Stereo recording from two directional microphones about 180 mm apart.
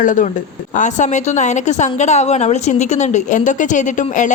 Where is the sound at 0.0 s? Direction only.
45° left (ahead or behind).